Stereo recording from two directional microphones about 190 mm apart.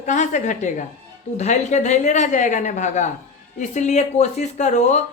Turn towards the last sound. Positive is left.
turn(degrees=40)  # may be behind; listen again after turning